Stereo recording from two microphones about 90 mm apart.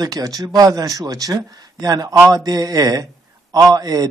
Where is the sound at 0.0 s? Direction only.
45° right (ahead or behind).